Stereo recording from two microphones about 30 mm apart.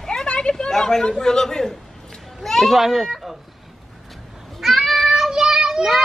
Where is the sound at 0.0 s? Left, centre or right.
Left.